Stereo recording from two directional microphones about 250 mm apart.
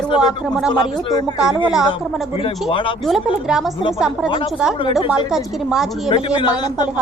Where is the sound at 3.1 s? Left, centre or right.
Centre.